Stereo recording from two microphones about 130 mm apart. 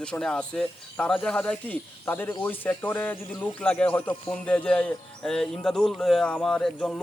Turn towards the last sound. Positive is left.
turn(degrees=5)  # may be behind; listen again after turning